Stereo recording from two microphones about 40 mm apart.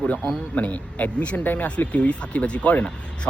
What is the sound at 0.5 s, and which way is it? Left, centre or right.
Speech, left.